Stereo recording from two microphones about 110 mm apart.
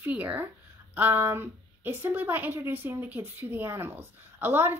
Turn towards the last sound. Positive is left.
turn(degrees=-20)  # may be behind; listen again after turning